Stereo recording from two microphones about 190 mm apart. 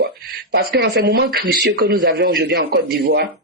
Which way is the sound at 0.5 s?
55° right (ahead or behind).